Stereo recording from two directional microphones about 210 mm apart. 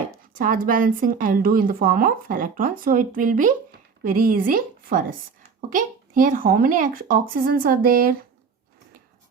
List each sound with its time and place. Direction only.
0.3 s a woman's voice: 40° right (ahead or behind)